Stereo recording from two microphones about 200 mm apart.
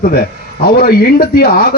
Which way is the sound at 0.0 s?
50° left (ahead or behind).